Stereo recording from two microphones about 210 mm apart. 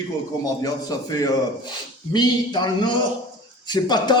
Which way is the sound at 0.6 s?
15° left (ahead or behind).